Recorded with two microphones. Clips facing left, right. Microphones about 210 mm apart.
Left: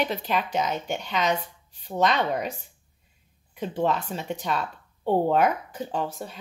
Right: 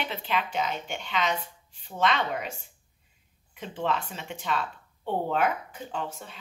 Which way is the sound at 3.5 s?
40° left (ahead or behind).